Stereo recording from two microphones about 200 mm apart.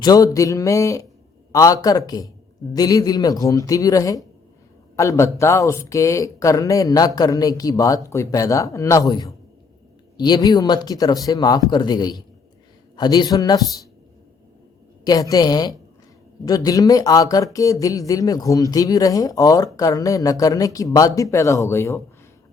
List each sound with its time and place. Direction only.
0.0 s a sound: 20° left (ahead or behind)
0.3 s speech: 15° left (ahead or behind)
15.0 s speech: 20° left (ahead or behind)